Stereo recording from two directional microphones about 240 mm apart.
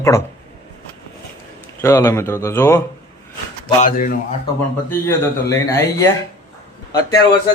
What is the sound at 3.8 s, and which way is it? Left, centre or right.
Speech, left.